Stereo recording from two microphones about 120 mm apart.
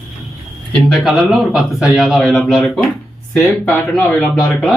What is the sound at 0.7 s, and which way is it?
A man's voice, centre (ahead or behind).